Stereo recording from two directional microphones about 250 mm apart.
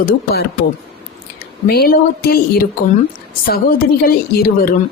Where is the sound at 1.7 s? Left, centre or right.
Left.